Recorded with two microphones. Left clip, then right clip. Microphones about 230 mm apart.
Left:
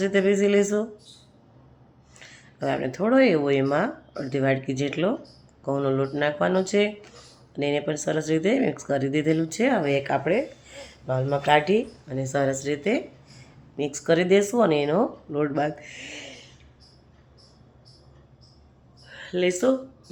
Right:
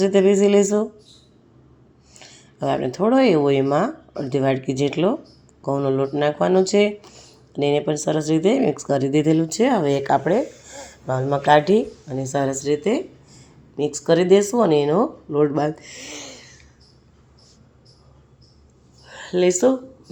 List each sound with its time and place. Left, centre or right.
0.0 s speech: centre
2.1 s speech: centre
19.0 s a sound: right